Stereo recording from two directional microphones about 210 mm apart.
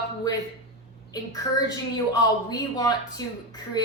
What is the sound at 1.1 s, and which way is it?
Speech, 20° left (ahead or behind).